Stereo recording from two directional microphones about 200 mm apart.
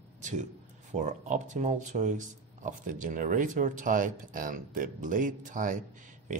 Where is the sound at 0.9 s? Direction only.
35° right (ahead or behind).